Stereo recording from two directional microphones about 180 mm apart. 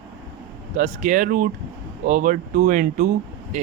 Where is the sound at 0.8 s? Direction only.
45° right (ahead or behind).